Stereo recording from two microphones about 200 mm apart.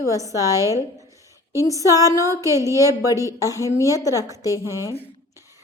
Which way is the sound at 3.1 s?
15° left (ahead or behind).